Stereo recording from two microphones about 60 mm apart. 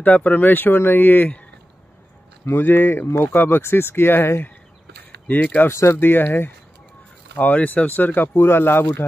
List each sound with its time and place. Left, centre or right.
0.0 s speech: left
2.4 s speech: left
5.3 s speech: left
5.7 s speech: left
5.9 s speech: left
7.3 s speech: left
8.4 s speech: left